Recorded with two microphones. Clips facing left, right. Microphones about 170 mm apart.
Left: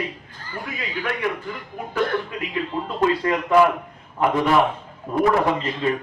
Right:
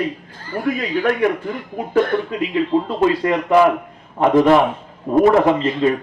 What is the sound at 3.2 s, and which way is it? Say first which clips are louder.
Speech: right 4 dB; 30° right (ahead or behind).